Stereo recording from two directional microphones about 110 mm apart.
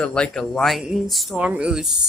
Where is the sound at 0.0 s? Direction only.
10° left (ahead or behind).